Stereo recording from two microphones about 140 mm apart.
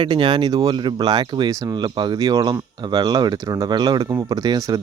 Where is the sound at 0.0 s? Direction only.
35° right (ahead or behind).